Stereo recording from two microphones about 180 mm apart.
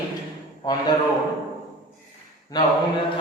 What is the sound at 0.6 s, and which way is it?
Speech, 25° left (ahead or behind).